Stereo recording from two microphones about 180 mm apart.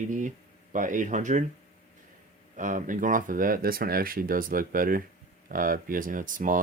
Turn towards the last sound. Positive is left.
turn(degrees=-50)  # may be behind; listen again after turning